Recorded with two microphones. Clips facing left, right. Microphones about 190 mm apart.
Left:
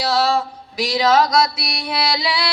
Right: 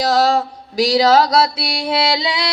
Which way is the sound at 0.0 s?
40° right (ahead or behind).